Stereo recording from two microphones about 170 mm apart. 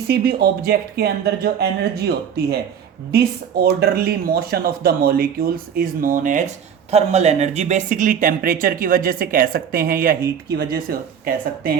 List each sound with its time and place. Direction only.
0.1 s speech: 65° right (ahead or behind); by 6.5 s 50° right (ahead or behind)
6.9 s speech: 40° right (ahead or behind); by 11.8 s 60° right (ahead or behind)